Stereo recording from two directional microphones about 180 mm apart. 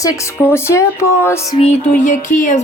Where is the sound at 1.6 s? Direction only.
35° left (ahead or behind).